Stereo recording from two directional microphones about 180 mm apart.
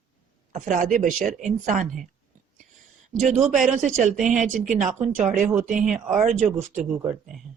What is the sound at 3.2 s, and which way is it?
Speech, 40° right (ahead or behind).